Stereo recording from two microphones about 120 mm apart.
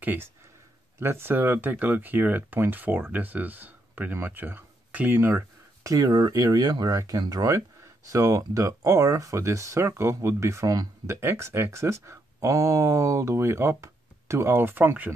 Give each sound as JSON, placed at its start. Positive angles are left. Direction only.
{"t": 0.0, "sound": "speech", "side_deg": -15}
{"t": 5.9, "sound": "speech", "side_deg": -30}